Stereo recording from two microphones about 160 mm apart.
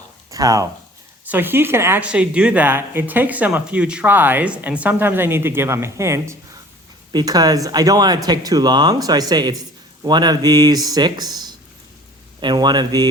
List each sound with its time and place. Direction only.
0.3 s speech: 20° right (ahead or behind)
1.2 s speech: 10° right (ahead or behind)